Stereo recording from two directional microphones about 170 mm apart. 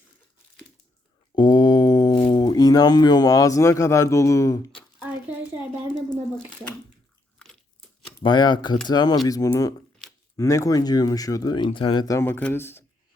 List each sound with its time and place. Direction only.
1.4 s speech: 25° left (ahead or behind)
7.3 s crunch: 5° left (ahead or behind)
8.2 s speech: 25° left (ahead or behind)